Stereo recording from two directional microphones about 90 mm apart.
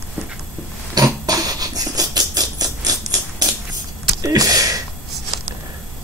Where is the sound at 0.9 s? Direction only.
40° right (ahead or behind).